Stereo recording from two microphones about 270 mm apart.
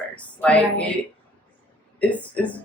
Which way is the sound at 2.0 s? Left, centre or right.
Centre.